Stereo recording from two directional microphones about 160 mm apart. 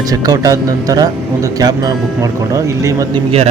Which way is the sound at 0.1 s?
20° right (ahead or behind).